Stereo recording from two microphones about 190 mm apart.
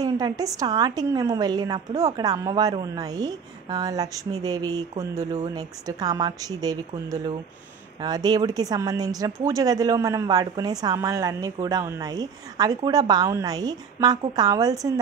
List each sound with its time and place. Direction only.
0.0 s a woman's voice: 20° right (ahead or behind)